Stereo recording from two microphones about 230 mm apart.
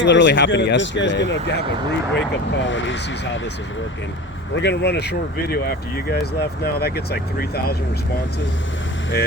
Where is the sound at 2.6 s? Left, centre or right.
Left.